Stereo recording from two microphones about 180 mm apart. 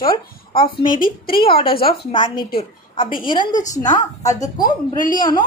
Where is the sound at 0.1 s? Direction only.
30° left (ahead or behind).